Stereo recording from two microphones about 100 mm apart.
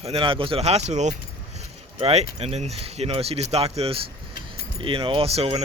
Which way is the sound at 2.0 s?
90° right.